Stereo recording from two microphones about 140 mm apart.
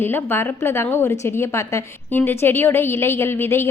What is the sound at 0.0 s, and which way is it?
A woman's voice, 15° left (ahead or behind).